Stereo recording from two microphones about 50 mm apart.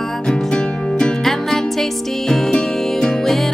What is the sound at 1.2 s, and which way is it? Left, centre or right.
Music, centre.